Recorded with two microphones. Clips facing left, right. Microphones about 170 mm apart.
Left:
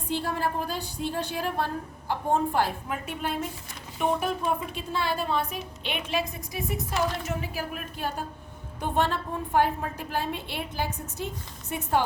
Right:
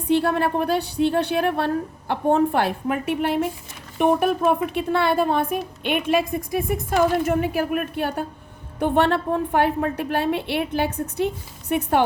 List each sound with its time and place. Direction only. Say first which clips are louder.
0.1 s a woman's voice: right 9 dB; 70° right (ahead or behind)